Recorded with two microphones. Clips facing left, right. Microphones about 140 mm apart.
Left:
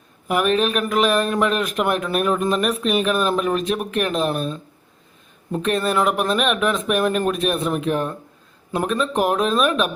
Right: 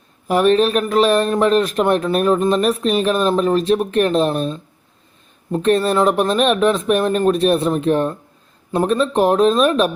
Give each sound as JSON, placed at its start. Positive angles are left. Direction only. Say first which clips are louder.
{"t": 0.3, "sound": "speech", "louder": "right 5 dB", "side_deg": -30}